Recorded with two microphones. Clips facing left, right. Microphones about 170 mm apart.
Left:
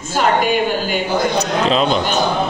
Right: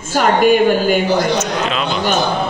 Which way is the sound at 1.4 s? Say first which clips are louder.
Left 3 dB; 35° left (ahead or behind).